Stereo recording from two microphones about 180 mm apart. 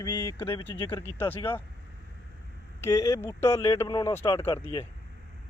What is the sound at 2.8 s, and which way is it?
Speech, 15° left (ahead or behind).